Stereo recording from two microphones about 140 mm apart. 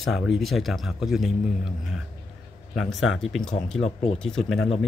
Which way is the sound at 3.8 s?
50° left (ahead or behind).